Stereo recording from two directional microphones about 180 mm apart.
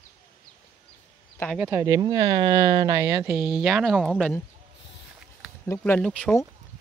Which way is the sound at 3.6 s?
Centre (ahead or behind).